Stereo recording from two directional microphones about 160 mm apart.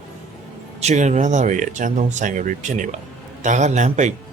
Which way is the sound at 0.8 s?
45° right (ahead or behind).